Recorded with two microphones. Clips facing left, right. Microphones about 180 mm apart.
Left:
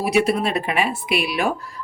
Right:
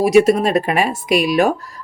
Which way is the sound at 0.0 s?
45° right (ahead or behind).